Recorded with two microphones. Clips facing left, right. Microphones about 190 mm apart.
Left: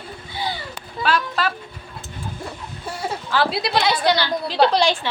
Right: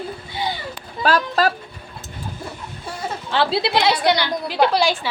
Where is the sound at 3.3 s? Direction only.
25° right (ahead or behind); by 5.1 s 5° right (ahead or behind).